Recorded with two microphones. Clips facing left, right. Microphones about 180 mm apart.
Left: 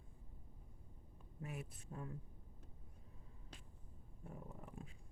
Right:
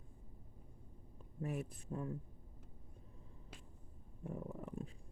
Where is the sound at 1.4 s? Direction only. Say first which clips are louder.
Right 8 dB; 35° right (ahead or behind).